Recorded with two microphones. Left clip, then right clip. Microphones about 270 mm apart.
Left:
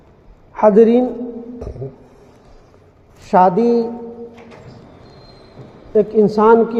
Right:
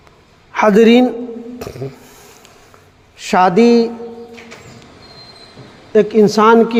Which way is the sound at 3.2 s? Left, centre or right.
Right.